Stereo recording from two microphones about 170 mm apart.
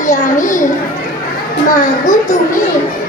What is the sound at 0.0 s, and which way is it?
Speech, 50° left (ahead or behind).